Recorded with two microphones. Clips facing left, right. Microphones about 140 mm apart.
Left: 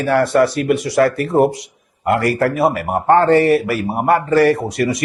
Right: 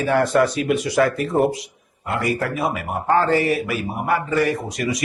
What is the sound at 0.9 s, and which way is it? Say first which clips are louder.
A man's voice: left 5 dB; 70° left (ahead or behind).